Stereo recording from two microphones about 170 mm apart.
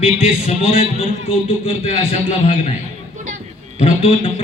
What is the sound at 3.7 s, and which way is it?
Speech, 35° left (ahead or behind).